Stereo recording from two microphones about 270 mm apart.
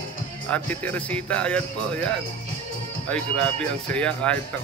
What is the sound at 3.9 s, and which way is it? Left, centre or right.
Speech, centre.